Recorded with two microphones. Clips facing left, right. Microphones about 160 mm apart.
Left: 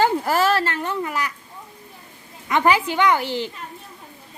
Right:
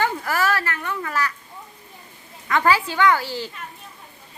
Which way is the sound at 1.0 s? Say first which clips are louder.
Even; 15° left (ahead or behind).